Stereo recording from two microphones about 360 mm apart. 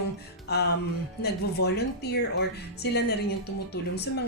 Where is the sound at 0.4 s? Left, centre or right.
Left.